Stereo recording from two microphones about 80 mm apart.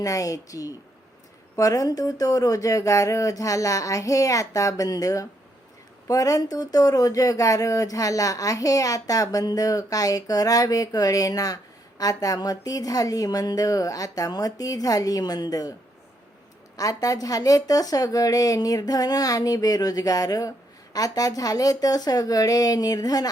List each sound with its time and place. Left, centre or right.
0.0 s speech: left
16.7 s speech: left